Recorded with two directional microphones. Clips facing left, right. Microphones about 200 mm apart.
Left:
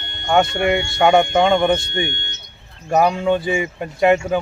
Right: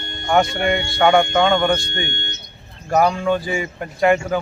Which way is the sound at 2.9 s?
20° left (ahead or behind).